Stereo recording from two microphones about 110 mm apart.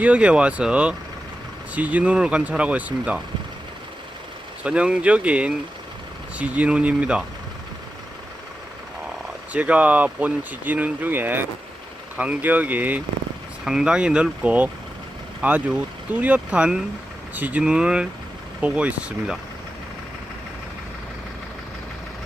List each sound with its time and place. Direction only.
0.0 s speech: 10° right (ahead or behind)
4.6 s speech: 10° right (ahead or behind)
9.5 s speech: 15° right (ahead or behind)